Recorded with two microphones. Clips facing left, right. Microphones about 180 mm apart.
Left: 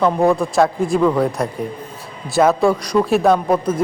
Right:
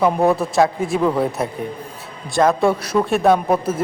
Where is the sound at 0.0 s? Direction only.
5° right (ahead or behind).